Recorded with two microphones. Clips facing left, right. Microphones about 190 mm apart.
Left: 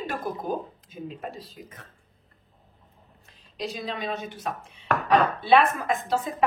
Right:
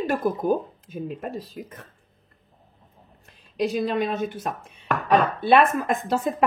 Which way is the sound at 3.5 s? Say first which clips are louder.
Right 9 dB; 50° right (ahead or behind).